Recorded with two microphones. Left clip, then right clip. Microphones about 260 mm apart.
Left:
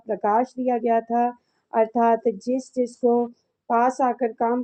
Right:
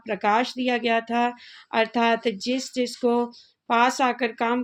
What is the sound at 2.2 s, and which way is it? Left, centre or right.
Speech, centre.